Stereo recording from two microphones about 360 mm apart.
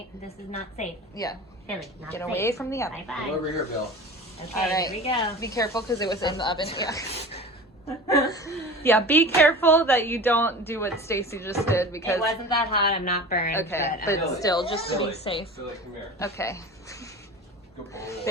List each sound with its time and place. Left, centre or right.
0.3 s speech: centre
4.4 s speech: centre
12.5 s speech: left
13.5 s a woman's voice: centre